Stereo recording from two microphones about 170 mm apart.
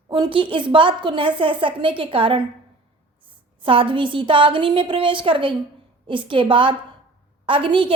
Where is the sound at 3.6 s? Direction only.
30° right (ahead or behind).